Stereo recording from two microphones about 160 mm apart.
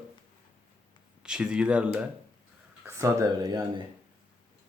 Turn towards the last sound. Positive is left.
turn(degrees=-25)  # may be behind; listen again after turning